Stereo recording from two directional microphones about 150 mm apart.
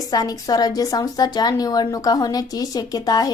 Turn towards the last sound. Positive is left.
turn(degrees=25)  # may be behind; listen again after turning